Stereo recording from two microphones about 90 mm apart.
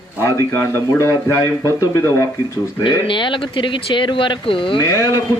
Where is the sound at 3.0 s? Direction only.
65° left (ahead or behind).